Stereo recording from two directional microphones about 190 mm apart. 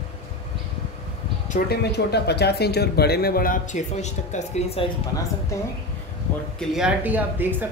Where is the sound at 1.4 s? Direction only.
50° left (ahead or behind); by 4.9 s 35° left (ahead or behind).